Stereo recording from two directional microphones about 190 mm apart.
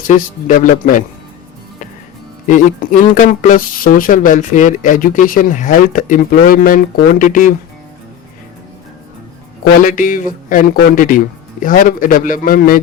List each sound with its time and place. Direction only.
0.1 s speech: 45° left (ahead or behind)
2.5 s speech: 45° left (ahead or behind)
9.8 s speech: 45° left (ahead or behind)